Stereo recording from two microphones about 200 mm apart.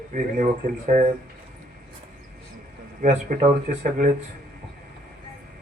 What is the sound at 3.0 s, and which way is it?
Speech, 40° right (ahead or behind).